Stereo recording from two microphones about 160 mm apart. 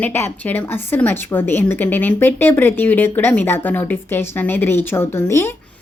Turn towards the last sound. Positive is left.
turn(degrees=15)  # may be behind; listen again after turning